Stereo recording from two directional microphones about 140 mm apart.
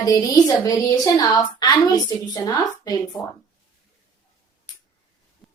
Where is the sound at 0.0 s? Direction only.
25° left (ahead or behind).